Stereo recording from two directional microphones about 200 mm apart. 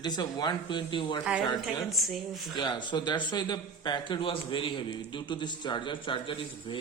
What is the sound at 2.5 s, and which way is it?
A man's voice, 20° left (ahead or behind).